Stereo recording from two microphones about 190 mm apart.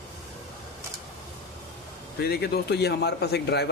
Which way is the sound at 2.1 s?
55° left (ahead or behind).